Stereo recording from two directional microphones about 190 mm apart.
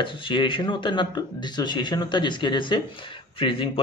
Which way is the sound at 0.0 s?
25° left (ahead or behind).